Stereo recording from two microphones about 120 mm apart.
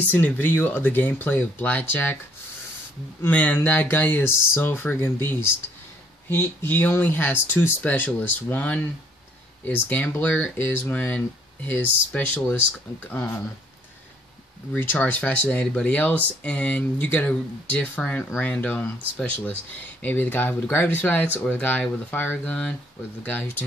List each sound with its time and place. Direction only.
0.0 s speech: 15° left (ahead or behind)
3.2 s speech: 15° left (ahead or behind)
9.8 s speech: 15° left (ahead or behind)
14.7 s speech: 15° left (ahead or behind)